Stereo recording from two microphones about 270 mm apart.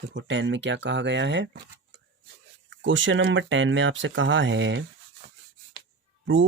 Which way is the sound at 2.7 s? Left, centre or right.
Right.